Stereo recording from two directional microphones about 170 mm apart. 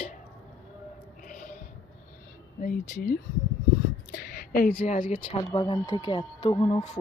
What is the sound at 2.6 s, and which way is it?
Speech, 55° left (ahead or behind).